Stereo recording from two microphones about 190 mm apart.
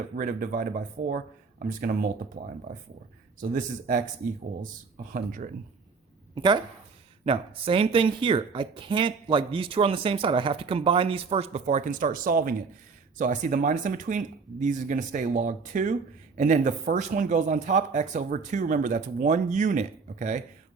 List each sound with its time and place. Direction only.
0.2 s speech: 45° right (ahead or behind)
3.5 s speech: 45° right (ahead or behind)
5.1 s speech: 45° right (ahead or behind)
6.3 s speech: 25° right (ahead or behind); by 20.4 s 40° right (ahead or behind)